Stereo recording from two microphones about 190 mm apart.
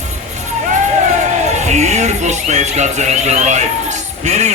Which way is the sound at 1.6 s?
35° right (ahead or behind).